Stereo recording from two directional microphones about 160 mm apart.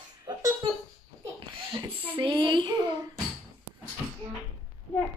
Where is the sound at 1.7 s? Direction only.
30° right (ahead or behind).